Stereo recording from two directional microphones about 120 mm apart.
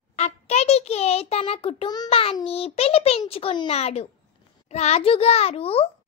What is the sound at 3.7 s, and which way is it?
A child's voice, 60° left (ahead or behind).